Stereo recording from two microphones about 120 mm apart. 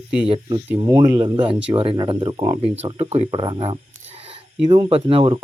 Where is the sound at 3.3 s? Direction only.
45° right (ahead or behind).